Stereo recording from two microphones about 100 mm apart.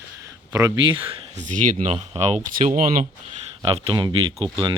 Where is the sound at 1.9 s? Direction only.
90° right.